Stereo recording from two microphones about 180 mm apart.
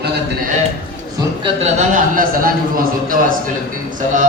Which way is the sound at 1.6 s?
45° right (ahead or behind).